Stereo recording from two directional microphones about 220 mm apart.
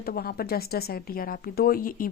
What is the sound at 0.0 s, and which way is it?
A woman's voice, 45° left (ahead or behind).